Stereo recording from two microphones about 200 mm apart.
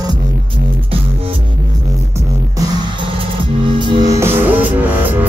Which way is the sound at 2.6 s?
25° right (ahead or behind).